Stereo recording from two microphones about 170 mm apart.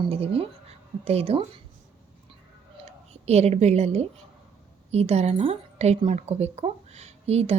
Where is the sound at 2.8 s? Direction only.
40° right (ahead or behind).